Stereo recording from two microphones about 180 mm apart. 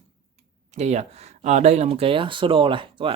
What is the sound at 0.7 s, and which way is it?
Speech, 40° right (ahead or behind).